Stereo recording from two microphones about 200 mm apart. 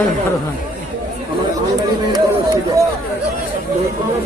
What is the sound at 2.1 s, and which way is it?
Run, 20° right (ahead or behind).